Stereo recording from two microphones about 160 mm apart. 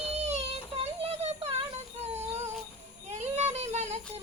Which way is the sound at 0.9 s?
40° right (ahead or behind).